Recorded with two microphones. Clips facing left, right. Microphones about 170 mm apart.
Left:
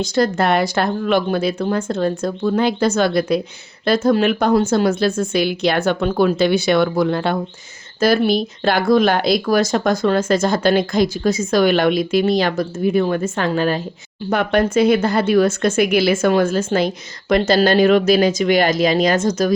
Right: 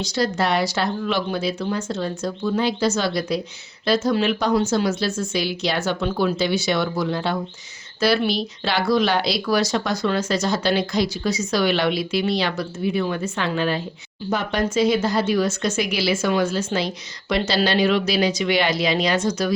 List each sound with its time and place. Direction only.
0.0 s speech: 50° left (ahead or behind)
14.3 s speech: 60° left (ahead or behind)